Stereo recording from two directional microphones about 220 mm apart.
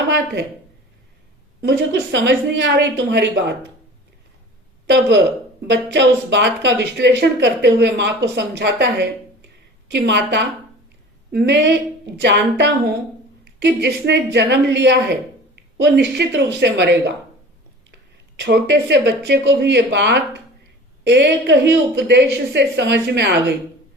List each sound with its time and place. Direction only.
1.6 s speech: 50° right (ahead or behind)
4.9 s speech: 50° right (ahead or behind)
18.3 s speech: 50° right (ahead or behind)